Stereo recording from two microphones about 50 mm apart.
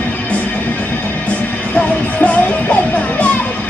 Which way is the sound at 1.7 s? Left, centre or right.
Left.